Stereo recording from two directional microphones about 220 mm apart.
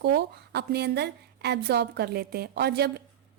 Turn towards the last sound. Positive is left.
turn(degrees=-45)  # may be behind; listen again after turning